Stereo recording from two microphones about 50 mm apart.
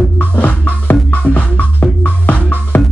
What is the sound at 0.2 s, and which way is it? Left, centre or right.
Music, left.